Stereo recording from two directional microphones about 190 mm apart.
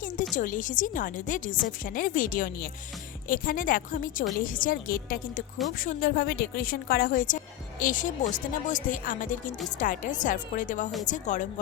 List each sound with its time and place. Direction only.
0.3 s a woman's voice: 45° left (ahead or behind)